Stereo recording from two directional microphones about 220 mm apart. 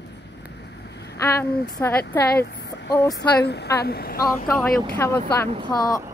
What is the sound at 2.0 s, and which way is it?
Speech, 50° left (ahead or behind).